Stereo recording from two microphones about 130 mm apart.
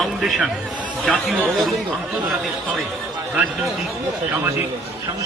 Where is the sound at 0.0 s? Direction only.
Centre (ahead or behind).